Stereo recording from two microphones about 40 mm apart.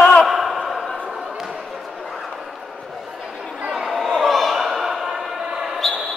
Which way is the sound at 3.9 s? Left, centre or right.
Centre.